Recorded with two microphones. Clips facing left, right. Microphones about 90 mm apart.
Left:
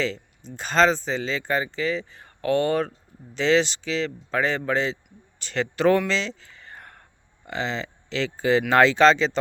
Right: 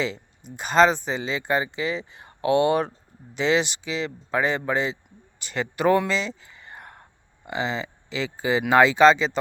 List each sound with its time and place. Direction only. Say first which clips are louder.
0.0 s speech: left 1 dB; 15° right (ahead or behind)
6.1 s a sound: even; 10° right (ahead or behind)
7.4 s speech: right 1 dB; 10° right (ahead or behind)